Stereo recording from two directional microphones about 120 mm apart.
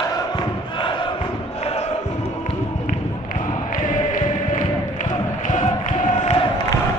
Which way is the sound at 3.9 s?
90° left.